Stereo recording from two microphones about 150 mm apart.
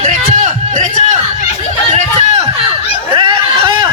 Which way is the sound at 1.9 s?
45° right (ahead or behind).